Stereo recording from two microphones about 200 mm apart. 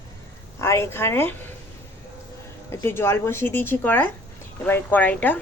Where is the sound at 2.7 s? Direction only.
10° left (ahead or behind).